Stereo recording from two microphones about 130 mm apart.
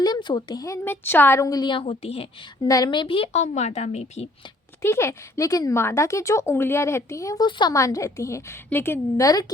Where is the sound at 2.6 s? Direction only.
30° left (ahead or behind); by 4.2 s 60° left (ahead or behind).